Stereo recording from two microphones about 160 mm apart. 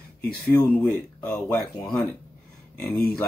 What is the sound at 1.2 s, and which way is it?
Speech, 10° left (ahead or behind).